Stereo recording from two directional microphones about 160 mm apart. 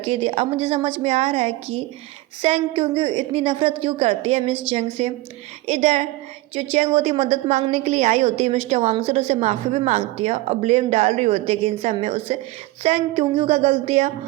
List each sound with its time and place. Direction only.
0.0 s a woman's voice: 35° right (ahead or behind)